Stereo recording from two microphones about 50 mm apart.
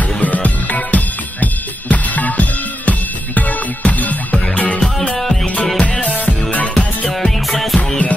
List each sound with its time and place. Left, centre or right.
0.2 s music: left
4.7 s music: centre
5.8 s music: left
7.1 s music: centre